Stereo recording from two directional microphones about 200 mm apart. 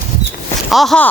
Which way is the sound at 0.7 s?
Centre (ahead or behind).